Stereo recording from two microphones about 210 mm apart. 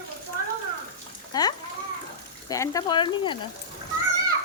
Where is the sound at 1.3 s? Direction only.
20° left (ahead or behind).